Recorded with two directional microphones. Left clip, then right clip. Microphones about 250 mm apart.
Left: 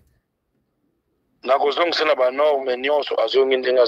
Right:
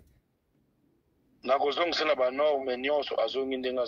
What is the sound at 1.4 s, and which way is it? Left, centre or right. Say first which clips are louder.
Speech: left 8 dB; left.